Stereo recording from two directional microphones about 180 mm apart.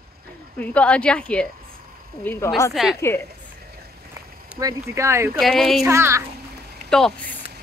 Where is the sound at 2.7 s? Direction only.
Centre (ahead or behind).